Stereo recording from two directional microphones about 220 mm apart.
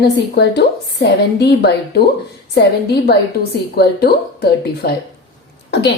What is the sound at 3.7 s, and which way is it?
A woman's voice, 45° left (ahead or behind).